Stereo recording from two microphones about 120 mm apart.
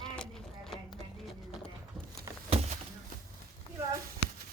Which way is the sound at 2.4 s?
60° right (ahead or behind).